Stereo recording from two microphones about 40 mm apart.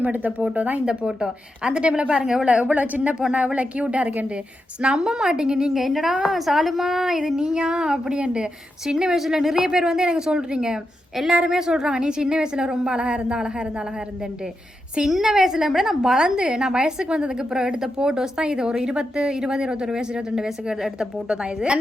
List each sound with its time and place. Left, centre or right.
0.0 s a woman's voice: right
0.9 s speech: right
2.2 s speech: centre
2.5 s a woman's voice: right
4.8 s speech: centre
5.7 s a woman's voice: centre
9.1 s speech: centre
15.0 s speech: centre
16.2 s speech: centre